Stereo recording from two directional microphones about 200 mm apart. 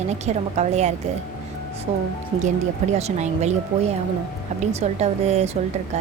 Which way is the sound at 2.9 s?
35° right (ahead or behind).